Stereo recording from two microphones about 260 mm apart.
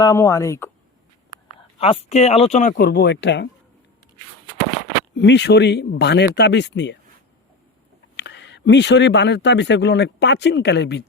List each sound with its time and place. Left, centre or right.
0.0 s speech: centre
1.5 s speech: left
5.1 s speech: left
8.1 s speech: left